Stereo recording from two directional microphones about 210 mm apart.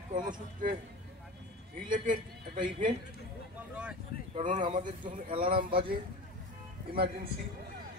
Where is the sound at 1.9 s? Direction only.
40° right (ahead or behind).